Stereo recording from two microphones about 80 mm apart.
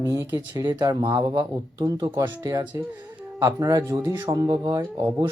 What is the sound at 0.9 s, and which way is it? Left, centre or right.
Speech, right.